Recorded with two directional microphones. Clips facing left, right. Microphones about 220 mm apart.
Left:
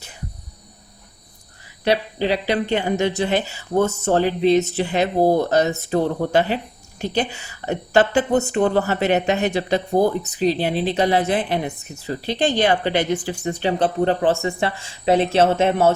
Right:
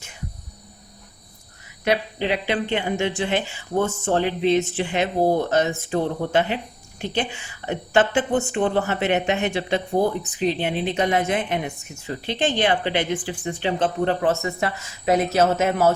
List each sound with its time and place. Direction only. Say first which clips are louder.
1.8 s a woman's voice: left 3 dB; 35° left (ahead or behind)